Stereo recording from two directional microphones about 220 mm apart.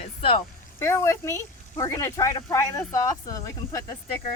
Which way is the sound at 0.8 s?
10° left (ahead or behind).